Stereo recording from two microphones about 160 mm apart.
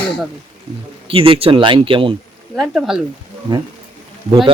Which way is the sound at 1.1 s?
35° right (ahead or behind).